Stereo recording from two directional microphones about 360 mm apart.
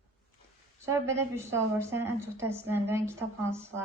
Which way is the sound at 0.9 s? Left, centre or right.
Centre.